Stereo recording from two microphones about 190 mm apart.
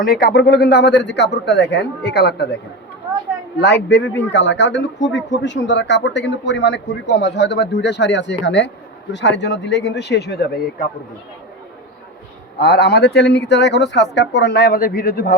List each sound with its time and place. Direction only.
0.0 s a man's voice: 50° left (ahead or behind)
3.6 s a man's voice: 60° left (ahead or behind)
12.5 s a man's voice: 55° left (ahead or behind)